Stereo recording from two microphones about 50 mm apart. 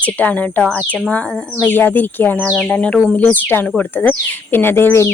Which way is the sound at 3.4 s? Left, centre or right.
Left.